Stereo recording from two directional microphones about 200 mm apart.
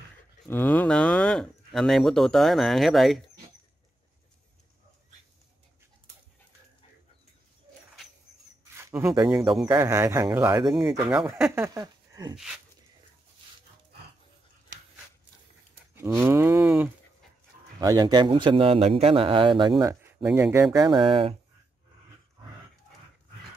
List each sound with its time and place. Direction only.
0.5 s speech: 10° left (ahead or behind)
8.7 s speech: 10° right (ahead or behind)
9.7 s livestock: 15° right (ahead or behind)
10.6 s speech: centre (ahead or behind)
11.1 s livestock: 10° right (ahead or behind)
11.5 s speech: 15° right (ahead or behind)
15.9 s livestock: 10° right (ahead or behind)
17.7 s a man's voice: 20° right (ahead or behind)
20.7 s a man's voice: 20° right (ahead or behind)